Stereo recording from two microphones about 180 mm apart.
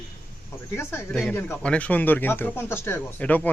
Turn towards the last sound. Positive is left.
turn(degrees=10)  # may be behind; listen again after turning